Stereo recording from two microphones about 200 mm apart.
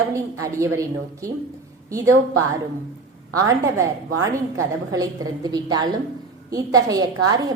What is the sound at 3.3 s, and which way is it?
Speech, 15° right (ahead or behind).